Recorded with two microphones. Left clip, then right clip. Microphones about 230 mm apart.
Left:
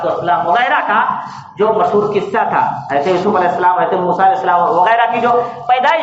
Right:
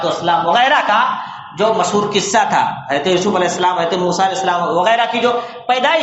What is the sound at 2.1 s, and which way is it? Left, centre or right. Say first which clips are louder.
A man's voice: even; right.